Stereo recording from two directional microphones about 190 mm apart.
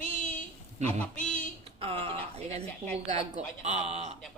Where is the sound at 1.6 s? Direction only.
30° right (ahead or behind).